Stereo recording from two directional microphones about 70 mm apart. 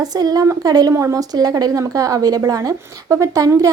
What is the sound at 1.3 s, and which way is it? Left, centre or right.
A woman's voice, right.